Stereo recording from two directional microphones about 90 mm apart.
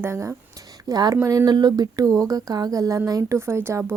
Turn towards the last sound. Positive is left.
turn(degrees=-25)  # may be behind; listen again after turning